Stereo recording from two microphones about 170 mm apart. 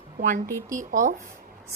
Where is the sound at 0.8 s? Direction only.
50° right (ahead or behind).